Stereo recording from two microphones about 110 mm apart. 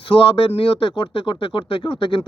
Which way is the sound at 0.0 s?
50° left (ahead or behind).